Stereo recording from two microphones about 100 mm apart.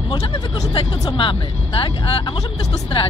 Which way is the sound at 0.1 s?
50° left (ahead or behind).